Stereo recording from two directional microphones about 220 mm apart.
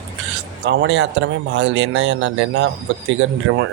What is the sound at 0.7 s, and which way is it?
Speech, 55° right (ahead or behind).